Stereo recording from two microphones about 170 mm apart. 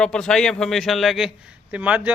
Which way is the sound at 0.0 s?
5° left (ahead or behind).